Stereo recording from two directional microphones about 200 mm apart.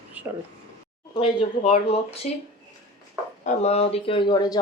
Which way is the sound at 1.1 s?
30° left (ahead or behind).